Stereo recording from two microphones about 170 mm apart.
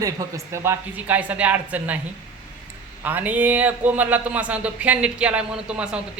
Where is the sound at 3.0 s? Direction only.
10° right (ahead or behind).